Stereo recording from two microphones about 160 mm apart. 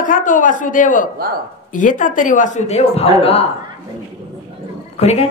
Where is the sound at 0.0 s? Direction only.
55° left (ahead or behind); by 3.4 s 40° left (ahead or behind).